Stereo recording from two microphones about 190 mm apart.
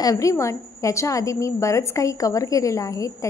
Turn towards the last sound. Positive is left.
turn(degrees=15)  # may be behind; listen again after turning